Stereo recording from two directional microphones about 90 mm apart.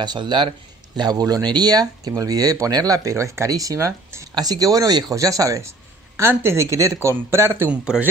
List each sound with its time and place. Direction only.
0.0 s speech: 55° right (ahead or behind); by 4.3 s 35° right (ahead or behind)
4.4 s a man's voice: 45° right (ahead or behind); by 7.7 s 25° right (ahead or behind)
7.7 s speech: 10° right (ahead or behind)